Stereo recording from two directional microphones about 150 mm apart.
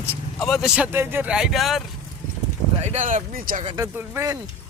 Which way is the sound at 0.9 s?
15° right (ahead or behind).